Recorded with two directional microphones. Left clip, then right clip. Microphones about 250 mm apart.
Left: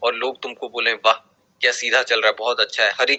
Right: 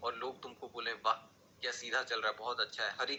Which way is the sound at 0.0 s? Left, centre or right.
Left.